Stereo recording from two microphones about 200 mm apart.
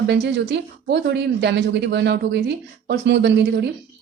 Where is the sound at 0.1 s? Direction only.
60° right (ahead or behind).